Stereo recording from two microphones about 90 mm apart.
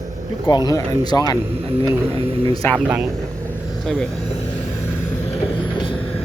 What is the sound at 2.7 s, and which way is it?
Speech, 15° right (ahead or behind).